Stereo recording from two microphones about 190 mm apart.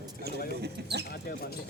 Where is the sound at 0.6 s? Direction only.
60° right (ahead or behind).